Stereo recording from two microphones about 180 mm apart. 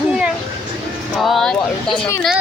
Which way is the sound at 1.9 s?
15° left (ahead or behind).